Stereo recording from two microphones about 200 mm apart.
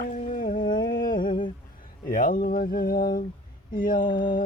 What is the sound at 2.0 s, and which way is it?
Speech, 45° left (ahead or behind).